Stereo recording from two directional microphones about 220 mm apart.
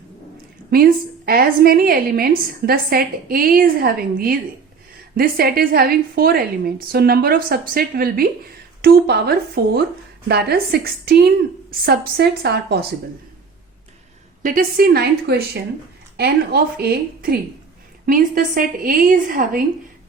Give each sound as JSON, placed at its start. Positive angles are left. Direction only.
{"t": 0.7, "sound": "a woman's voice", "side_deg": -45}
{"t": 14.4, "sound": "a woman's voice", "side_deg": -40}